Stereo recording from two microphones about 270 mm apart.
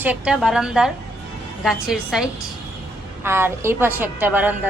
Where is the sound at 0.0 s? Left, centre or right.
Centre.